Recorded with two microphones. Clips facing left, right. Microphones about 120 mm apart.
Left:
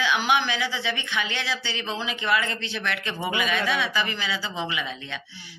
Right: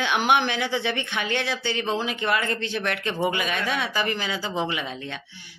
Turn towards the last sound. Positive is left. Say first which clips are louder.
# right 1 dB
turn(degrees=-45)  # may be behind; listen again after turning